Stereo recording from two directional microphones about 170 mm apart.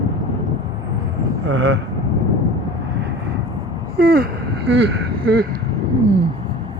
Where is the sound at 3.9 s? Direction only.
60° right (ahead or behind).